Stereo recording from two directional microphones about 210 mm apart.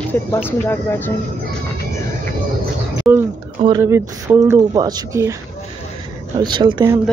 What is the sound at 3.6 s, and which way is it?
Speech, 15° right (ahead or behind).